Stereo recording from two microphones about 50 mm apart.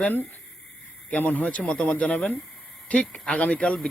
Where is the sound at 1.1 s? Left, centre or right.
Left.